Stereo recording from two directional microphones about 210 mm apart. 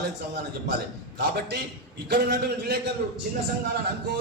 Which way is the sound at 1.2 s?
55° right (ahead or behind).